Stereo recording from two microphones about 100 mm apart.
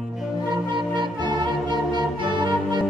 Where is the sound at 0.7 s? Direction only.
50° right (ahead or behind).